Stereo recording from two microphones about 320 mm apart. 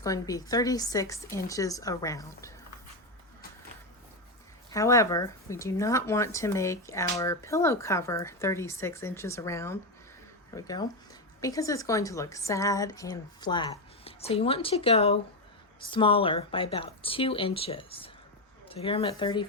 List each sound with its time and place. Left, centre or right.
0.0 s speech: centre
4.7 s speech: centre